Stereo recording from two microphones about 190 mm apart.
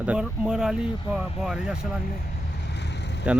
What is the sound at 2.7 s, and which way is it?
Vehicle, 65° left (ahead or behind).